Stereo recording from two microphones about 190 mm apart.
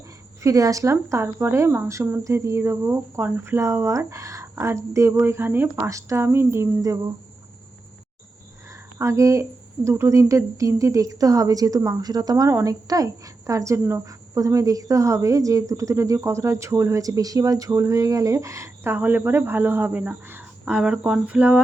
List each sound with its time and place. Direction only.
0.4 s speech: 15° right (ahead or behind)
8.7 s speech: 15° right (ahead or behind)